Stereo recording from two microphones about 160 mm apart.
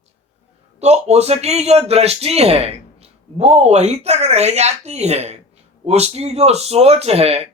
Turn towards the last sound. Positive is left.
turn(degrees=-40)  # may be behind; listen again after turning